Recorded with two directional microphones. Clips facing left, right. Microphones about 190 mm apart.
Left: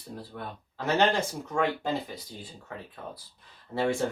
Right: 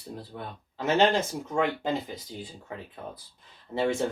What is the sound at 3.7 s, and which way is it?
Speech, centre (ahead or behind).